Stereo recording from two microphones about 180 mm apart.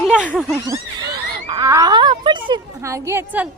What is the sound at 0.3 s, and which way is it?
Speech, centre (ahead or behind).